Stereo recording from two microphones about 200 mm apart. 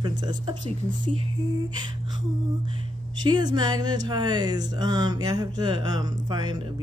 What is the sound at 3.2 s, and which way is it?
Speech, 20° right (ahead or behind).